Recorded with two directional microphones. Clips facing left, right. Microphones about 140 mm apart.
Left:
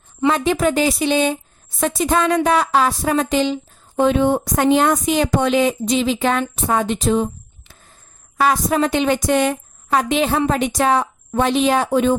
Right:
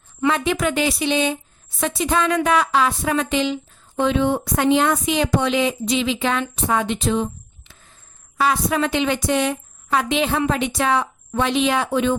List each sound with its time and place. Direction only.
0.2 s a woman's voice: 35° left (ahead or behind)
8.4 s a woman's voice: 40° left (ahead or behind)